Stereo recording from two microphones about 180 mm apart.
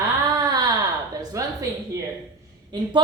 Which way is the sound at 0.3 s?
25° right (ahead or behind).